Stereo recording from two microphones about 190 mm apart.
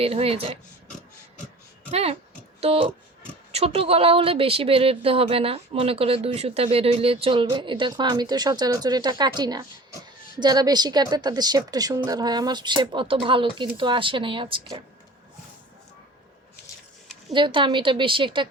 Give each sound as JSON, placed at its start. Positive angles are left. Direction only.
{"t": 0.0, "sound": "speech", "side_deg": -30}
{"t": 1.9, "sound": "speech", "side_deg": -30}
{"t": 17.3, "sound": "speech", "side_deg": -25}